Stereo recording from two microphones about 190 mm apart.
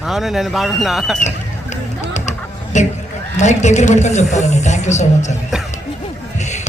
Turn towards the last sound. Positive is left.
turn(degrees=40)  # may be behind; listen again after turning